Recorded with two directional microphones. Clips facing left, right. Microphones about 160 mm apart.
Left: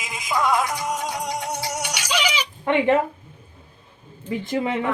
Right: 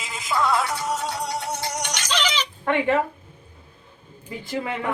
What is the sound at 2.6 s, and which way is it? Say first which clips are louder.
Speech: left 3 dB; 20° left (ahead or behind).